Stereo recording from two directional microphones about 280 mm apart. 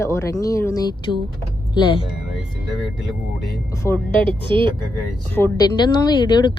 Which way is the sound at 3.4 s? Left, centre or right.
Centre.